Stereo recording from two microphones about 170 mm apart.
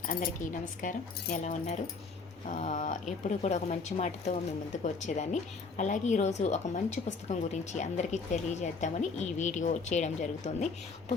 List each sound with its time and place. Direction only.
0.8 s speech: 50° left (ahead or behind)